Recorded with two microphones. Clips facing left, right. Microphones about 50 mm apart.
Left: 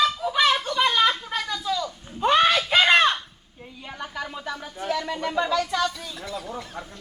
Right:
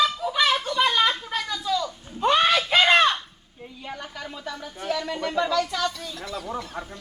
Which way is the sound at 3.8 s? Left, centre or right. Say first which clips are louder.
Left 3 dB; centre.